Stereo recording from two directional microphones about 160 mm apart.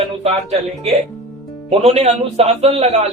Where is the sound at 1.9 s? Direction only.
40° right (ahead or behind).